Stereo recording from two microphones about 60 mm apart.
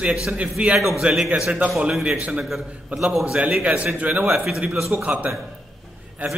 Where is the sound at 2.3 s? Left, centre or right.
Centre.